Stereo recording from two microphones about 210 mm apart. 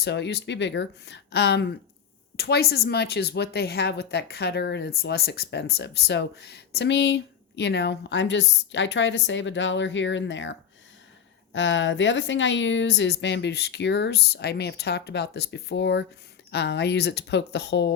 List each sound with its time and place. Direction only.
0.0 s speech: 55° left (ahead or behind)